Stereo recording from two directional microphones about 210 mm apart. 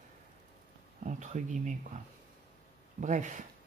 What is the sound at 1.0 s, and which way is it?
Speech, 35° right (ahead or behind).